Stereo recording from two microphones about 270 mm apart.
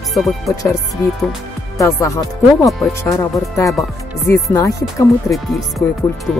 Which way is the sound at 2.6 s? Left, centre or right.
Centre.